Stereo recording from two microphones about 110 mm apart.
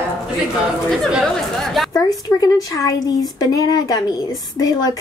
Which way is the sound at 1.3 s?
Centre (ahead or behind).